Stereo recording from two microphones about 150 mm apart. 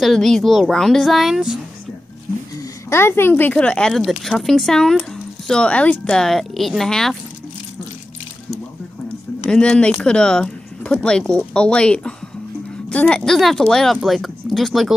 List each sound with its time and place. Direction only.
0.0 s speech: centre (ahead or behind)
2.5 s speech: 15° left (ahead or behind)
9.5 s speech: 5° left (ahead or behind)